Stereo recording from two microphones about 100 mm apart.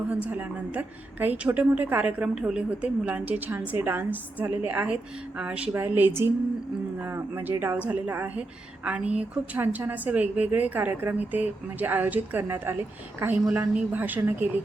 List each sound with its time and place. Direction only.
0.1 s a woman's voice: 15° right (ahead or behind)
5.8 s a woman's voice: 20° right (ahead or behind)